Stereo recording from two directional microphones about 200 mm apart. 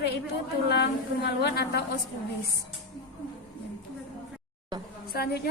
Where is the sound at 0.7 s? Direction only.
55° left (ahead or behind).